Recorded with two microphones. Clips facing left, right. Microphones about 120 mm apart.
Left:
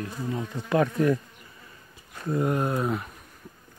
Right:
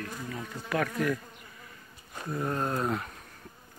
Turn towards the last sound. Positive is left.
turn(degrees=5)  # may be behind; listen again after turning